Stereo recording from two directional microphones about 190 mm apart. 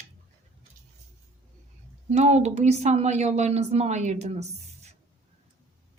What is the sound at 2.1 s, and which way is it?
A woman's voice, 35° right (ahead or behind).